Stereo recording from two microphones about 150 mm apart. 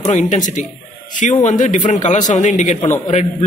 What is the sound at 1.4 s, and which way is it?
A man's voice, 55° left (ahead or behind).